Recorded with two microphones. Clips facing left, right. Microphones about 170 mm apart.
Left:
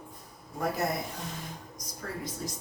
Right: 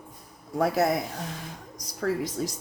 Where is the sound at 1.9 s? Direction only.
90° right.